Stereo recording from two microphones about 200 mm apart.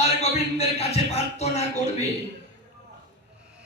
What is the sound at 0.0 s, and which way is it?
Speech, 30° left (ahead or behind).